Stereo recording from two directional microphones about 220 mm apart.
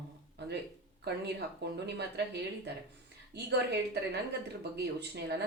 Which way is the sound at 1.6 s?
50° right (ahead or behind).